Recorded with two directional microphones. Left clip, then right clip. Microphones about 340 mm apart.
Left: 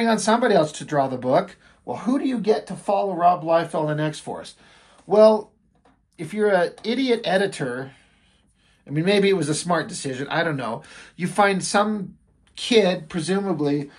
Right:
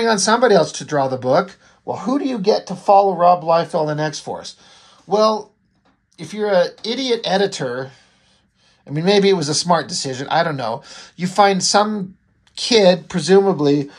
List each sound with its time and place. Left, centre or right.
0.0 s speech: centre